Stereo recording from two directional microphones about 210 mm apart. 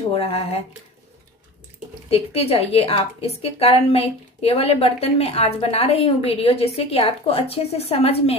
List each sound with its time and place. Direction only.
0.1 s a woman's voice: 30° left (ahead or behind)
2.0 s a woman's voice: 30° left (ahead or behind)